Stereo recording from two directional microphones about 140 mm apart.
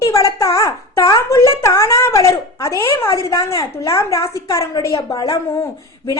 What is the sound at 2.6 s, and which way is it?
A woman's voice, 20° left (ahead or behind).